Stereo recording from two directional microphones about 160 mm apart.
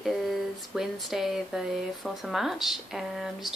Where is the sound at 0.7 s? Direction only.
Centre (ahead or behind).